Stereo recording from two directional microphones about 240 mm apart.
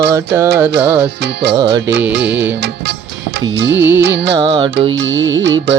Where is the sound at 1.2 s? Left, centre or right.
Right.